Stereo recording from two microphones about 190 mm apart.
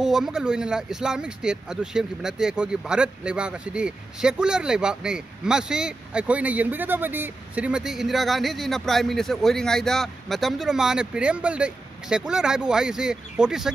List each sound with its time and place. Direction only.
0.0 s speech: centre (ahead or behind)